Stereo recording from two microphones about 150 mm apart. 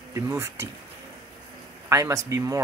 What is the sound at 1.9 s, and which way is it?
Speech, 20° right (ahead or behind).